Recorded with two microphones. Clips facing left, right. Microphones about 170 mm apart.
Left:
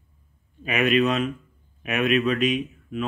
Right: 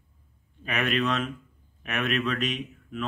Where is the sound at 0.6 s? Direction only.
10° left (ahead or behind).